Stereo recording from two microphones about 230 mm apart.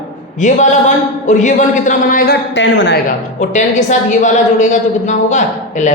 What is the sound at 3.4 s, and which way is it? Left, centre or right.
A woman's voice, left.